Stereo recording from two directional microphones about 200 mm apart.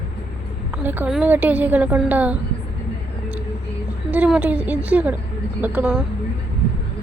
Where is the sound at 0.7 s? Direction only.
10° right (ahead or behind).